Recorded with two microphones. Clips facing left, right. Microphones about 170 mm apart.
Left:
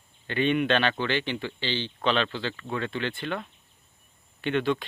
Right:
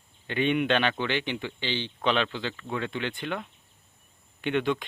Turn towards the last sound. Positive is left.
turn(degrees=-15)  # may be behind; listen again after turning